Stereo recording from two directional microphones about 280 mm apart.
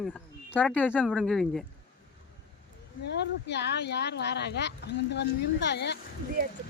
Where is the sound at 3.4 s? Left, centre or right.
Left.